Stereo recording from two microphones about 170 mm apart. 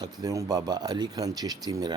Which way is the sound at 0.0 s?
20° right (ahead or behind).